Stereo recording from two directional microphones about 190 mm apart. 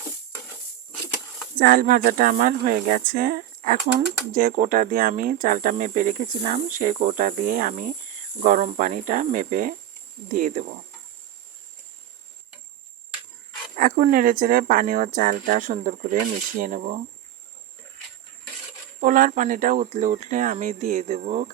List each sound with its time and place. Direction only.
1.5 s speech: 50° right (ahead or behind)
13.7 s speech: 45° right (ahead or behind)
18.9 s speech: 45° right (ahead or behind)